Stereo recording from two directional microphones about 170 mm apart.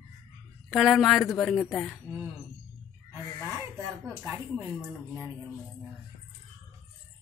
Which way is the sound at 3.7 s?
20° right (ahead or behind).